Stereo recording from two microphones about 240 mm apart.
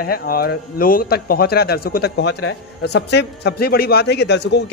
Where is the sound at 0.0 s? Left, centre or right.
Left.